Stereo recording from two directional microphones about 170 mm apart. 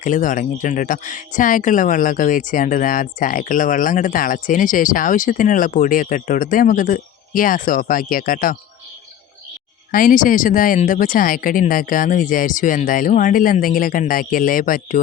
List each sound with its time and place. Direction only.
0.0 s speech: 50° left (ahead or behind)
9.9 s speech: 50° left (ahead or behind)